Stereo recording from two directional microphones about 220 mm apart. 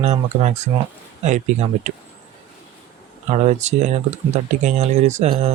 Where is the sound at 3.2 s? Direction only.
30° right (ahead or behind).